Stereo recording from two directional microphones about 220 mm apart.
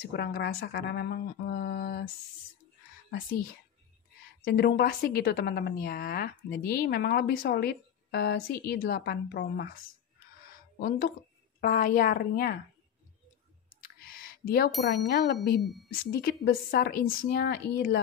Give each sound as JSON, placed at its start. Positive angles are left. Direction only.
{"t": 0.1, "sound": "a woman's voice", "side_deg": 50}
{"t": 4.5, "sound": "a woman's voice", "side_deg": 50}
{"t": 13.8, "sound": "a sound", "side_deg": 40}
{"t": 15.0, "sound": "a woman's voice", "side_deg": 45}
{"t": 15.6, "sound": "a woman's voice", "side_deg": 0}
{"t": 15.9, "sound": "a woman's voice", "side_deg": 45}